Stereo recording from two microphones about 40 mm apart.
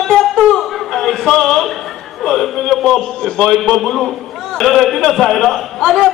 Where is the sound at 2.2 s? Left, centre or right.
Centre.